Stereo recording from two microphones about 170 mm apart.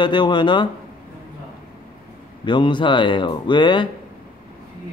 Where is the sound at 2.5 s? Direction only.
30° left (ahead or behind).